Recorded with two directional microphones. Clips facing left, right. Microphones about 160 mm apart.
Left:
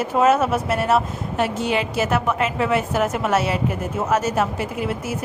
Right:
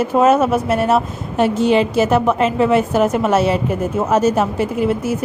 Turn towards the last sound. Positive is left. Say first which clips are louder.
# right 7 dB
turn(degrees=-25)  # may be behind; listen again after turning